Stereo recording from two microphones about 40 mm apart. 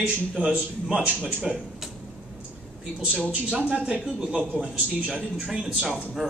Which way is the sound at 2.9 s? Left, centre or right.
Right.